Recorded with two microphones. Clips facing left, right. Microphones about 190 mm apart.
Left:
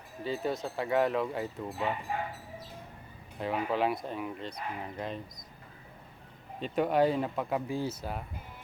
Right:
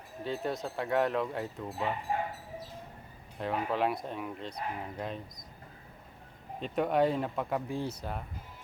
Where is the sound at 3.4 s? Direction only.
Centre (ahead or behind).